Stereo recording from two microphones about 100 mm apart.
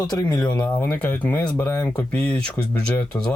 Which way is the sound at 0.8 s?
20° left (ahead or behind).